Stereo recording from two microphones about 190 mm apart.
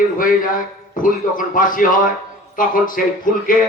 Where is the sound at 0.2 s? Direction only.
45° left (ahead or behind).